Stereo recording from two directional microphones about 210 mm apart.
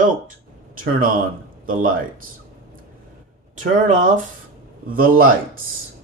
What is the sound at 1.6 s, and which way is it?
Speech, 40° right (ahead or behind).